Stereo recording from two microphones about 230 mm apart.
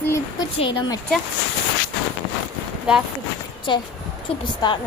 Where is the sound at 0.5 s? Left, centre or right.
Left.